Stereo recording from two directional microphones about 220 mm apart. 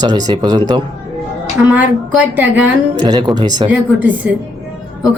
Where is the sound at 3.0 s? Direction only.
20° right (ahead or behind).